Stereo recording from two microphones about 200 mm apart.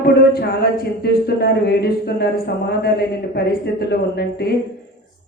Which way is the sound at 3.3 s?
55° left (ahead or behind).